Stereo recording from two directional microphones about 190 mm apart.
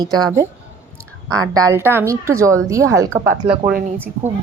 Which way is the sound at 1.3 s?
20° right (ahead or behind).